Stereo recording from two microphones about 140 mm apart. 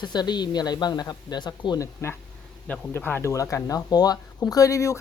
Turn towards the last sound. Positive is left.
turn(degrees=20)  # may be behind; listen again after turning